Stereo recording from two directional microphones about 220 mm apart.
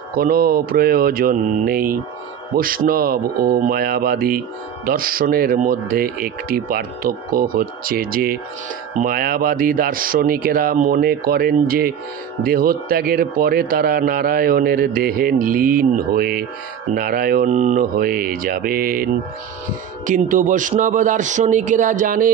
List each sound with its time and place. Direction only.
0.2 s mantra: 40° right (ahead or behind)
2.5 s speech: 40° right (ahead or behind)
16.1 s mantra: 45° right (ahead or behind)
16.9 s speech: 40° right (ahead or behind)
20.1 s speech: 35° right (ahead or behind)